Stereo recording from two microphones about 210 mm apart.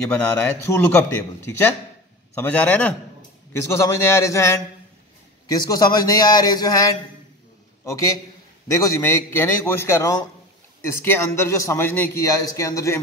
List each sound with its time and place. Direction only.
0.1 s a man's voice: 5° left (ahead or behind)
8.7 s a man's voice: 15° left (ahead or behind)